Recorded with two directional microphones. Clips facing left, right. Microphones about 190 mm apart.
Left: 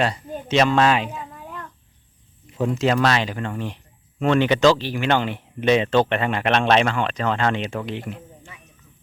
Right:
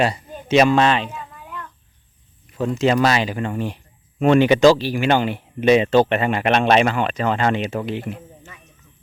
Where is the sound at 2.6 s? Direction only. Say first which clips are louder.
Right 2 dB; centre (ahead or behind).